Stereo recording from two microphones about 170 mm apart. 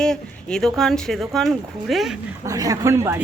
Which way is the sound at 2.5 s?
20° right (ahead or behind).